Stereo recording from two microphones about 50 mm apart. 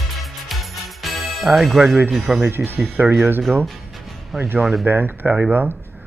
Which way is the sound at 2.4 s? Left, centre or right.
Right.